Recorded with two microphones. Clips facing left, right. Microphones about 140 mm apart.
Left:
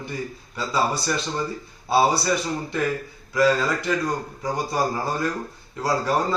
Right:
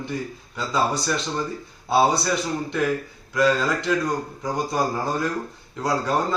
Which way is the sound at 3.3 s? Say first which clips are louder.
Even; 5° left (ahead or behind).